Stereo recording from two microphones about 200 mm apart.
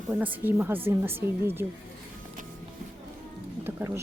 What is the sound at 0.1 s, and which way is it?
Speech, 10° right (ahead or behind).